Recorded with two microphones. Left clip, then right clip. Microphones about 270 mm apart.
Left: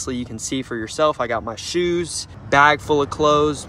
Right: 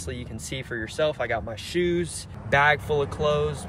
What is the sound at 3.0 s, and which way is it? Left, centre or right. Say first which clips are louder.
Speech: left 7 dB; left.